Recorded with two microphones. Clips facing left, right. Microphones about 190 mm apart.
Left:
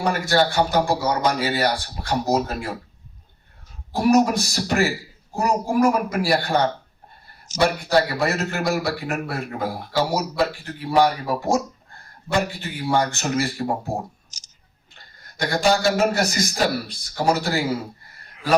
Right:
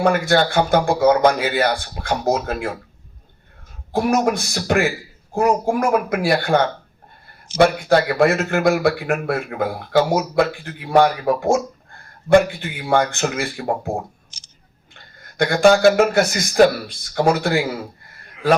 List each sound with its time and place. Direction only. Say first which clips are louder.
0.0 s a man's voice: right 4 dB; 55° right (ahead or behind)
3.9 s a man's voice: left 1 dB; 55° right (ahead or behind)
14.3 s a sound: right 3 dB; 45° left (ahead or behind)
15.4 s a man's voice: right 7 dB; 55° right (ahead or behind)